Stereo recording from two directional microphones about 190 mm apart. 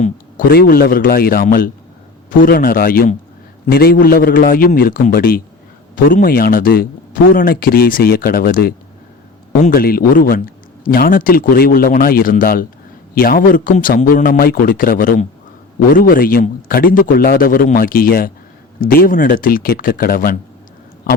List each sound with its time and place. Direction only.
0.0 s speech: 50° left (ahead or behind)